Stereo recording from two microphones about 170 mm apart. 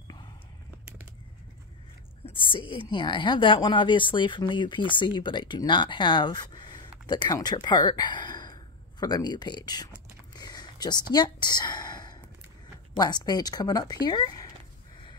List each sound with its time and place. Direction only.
2.2 s a woman's voice: 30° left (ahead or behind)
10.3 s a sound: 25° left (ahead or behind)
11.1 s a woman's voice: 25° left (ahead or behind)